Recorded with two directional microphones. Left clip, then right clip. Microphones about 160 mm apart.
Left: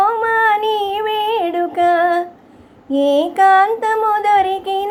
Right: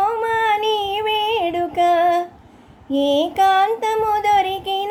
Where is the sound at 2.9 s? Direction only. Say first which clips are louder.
Left 3 dB; 10° right (ahead or behind).